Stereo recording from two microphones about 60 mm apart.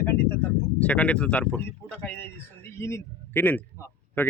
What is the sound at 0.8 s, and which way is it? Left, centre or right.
Speech, left.